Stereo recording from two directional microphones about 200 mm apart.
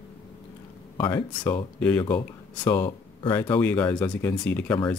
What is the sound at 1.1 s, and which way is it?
Speech, 10° left (ahead or behind).